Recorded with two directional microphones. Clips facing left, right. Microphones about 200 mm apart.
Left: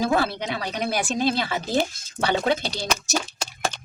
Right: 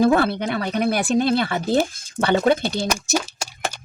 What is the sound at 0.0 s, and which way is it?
Speech, 55° right (ahead or behind).